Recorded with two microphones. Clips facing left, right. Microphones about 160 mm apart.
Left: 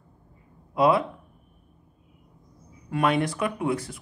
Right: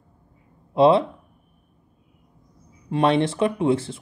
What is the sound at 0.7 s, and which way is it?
Speech, 25° right (ahead or behind).